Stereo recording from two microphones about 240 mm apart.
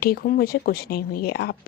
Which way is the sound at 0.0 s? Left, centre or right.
Left.